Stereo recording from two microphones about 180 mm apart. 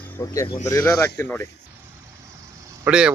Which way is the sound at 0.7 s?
15° left (ahead or behind).